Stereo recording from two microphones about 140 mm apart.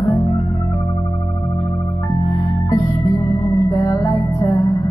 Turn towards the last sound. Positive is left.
turn(degrees=20)  # may be behind; listen again after turning